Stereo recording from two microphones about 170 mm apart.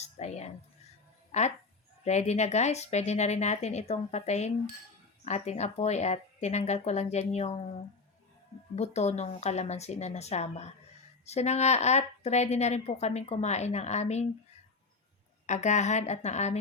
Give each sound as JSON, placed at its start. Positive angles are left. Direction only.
{"t": 0.0, "sound": "a woman's voice", "side_deg": 40}
{"t": 8.7, "sound": "a woman's voice", "side_deg": 40}
{"t": 15.4, "sound": "a woman's voice", "side_deg": 45}